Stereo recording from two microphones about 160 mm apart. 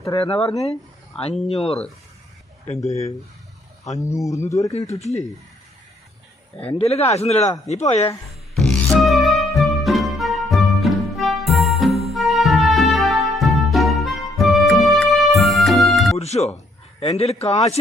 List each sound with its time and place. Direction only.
0.2 s a man's voice: 35° left (ahead or behind)
2.8 s speech: 20° left (ahead or behind)
6.7 s a man's voice: 40° left (ahead or behind)
8.5 s music: centre (ahead or behind)
16.1 s a man's voice: 40° left (ahead or behind)